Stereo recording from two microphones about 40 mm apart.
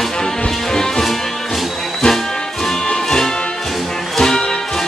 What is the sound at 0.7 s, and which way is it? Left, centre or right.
Music, centre.